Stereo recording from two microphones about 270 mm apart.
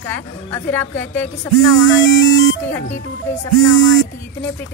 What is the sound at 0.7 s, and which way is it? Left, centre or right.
Speech, centre.